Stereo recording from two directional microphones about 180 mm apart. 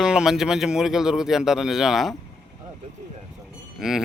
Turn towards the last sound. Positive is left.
turn(degrees=0)  # may be behind; listen again after turning